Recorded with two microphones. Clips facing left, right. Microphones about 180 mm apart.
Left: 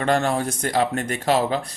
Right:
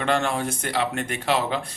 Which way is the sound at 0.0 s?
40° left (ahead or behind).